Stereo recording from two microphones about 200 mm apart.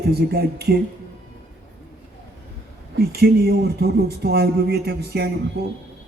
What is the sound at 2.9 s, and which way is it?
Speech, 50° right (ahead or behind).